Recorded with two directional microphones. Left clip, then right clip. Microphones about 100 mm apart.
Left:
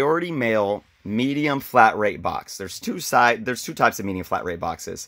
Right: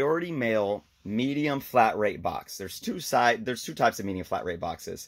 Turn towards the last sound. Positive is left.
turn(degrees=20)  # may be behind; listen again after turning